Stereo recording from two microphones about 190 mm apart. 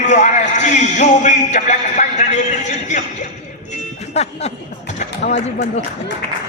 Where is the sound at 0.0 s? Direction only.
40° left (ahead or behind).